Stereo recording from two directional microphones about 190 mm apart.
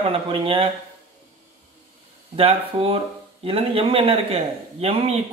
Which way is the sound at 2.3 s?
30° right (ahead or behind).